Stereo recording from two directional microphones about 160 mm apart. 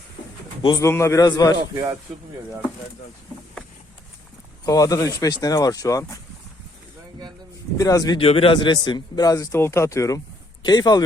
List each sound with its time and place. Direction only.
0.6 s a man's voice: 25° left (ahead or behind)
0.9 s a man's voice: 15° left (ahead or behind)
1.7 s speech: 20° right (ahead or behind)
4.6 s a man's voice: 20° left (ahead or behind)
7.8 s a man's voice: 20° left (ahead or behind)
8.2 s a man's voice: 35° left (ahead or behind)